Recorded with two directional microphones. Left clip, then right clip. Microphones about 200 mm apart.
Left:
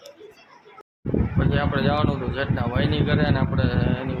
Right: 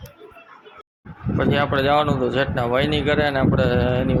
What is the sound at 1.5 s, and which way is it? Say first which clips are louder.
Speech: right 5 dB; 30° right (ahead or behind).